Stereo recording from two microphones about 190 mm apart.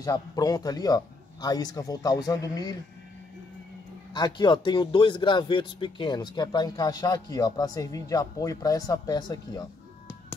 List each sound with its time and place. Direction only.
0.0 s a man's voice: 20° left (ahead or behind)
4.1 s a man's voice: 25° left (ahead or behind)